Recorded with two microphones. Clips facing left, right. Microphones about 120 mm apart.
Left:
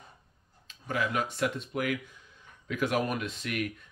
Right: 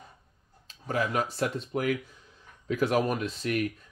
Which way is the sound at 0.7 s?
35° right (ahead or behind).